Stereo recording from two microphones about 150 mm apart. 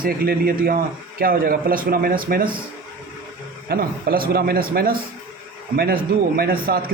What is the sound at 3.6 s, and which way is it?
A man's voice, 90° right.